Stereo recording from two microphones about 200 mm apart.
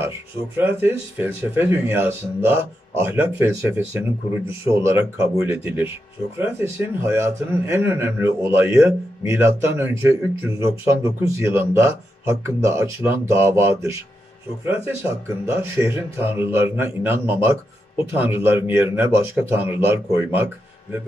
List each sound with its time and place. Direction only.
0.6 s speech: 10° right (ahead or behind)